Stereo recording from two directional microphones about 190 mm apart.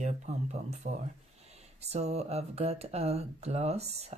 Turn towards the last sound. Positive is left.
turn(degrees=-35)  # may be behind; listen again after turning